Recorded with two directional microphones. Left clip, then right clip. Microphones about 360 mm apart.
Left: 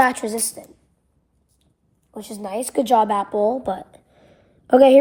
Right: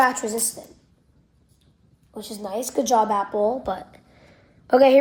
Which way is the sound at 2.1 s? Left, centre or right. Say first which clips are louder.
Left 2 dB; left.